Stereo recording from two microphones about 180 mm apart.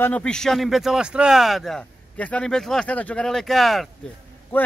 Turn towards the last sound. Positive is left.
turn(degrees=10)  # may be behind; listen again after turning